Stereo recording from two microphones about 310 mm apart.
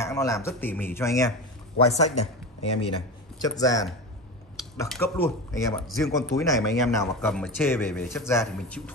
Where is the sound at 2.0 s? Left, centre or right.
Centre.